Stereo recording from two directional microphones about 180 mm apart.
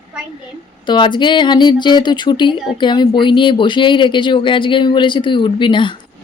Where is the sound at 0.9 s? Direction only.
25° left (ahead or behind).